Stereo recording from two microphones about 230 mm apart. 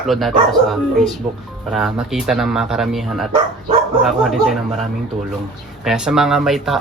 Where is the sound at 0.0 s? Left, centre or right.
Centre.